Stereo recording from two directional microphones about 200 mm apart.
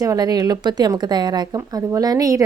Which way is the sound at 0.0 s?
20° right (ahead or behind).